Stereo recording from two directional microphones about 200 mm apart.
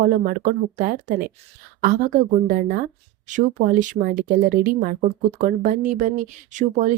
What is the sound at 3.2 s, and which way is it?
Speech, 40° right (ahead or behind).